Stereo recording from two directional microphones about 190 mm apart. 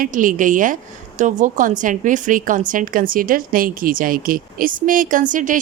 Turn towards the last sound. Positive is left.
turn(degrees=-45)  # may be behind; listen again after turning